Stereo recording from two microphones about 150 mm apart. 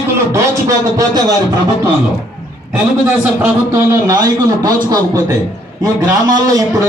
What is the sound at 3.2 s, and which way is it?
A man's voice, 15° right (ahead or behind).